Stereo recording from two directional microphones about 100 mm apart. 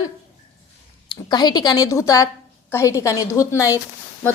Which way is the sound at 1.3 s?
45° left (ahead or behind).